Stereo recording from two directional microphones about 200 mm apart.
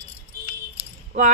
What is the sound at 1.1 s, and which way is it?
Speech, 35° right (ahead or behind).